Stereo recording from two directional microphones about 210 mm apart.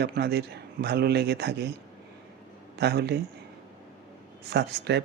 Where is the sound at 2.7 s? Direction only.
55° right (ahead or behind).